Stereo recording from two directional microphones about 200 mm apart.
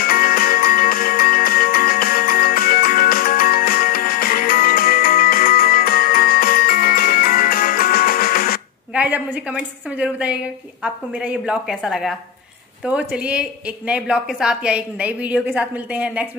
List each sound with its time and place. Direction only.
0.0 s music: 45° left (ahead or behind)
8.9 s a woman's voice: 10° right (ahead or behind)